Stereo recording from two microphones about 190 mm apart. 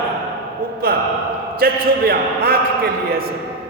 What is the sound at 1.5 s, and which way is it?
A man's voice, 55° right (ahead or behind).